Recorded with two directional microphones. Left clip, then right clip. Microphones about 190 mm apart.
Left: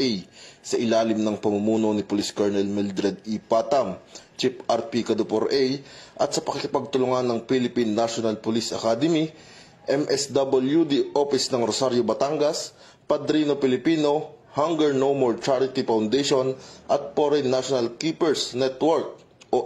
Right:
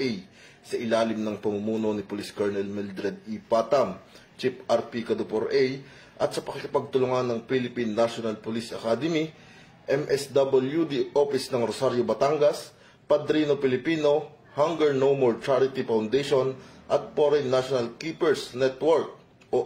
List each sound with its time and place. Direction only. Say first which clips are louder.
0.8 s a man's voice: left 3 dB; 35° left (ahead or behind)